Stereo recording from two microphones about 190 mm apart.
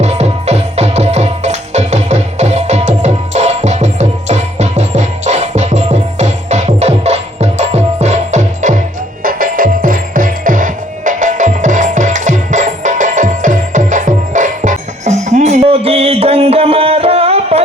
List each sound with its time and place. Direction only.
0.0 s music: 35° right (ahead or behind)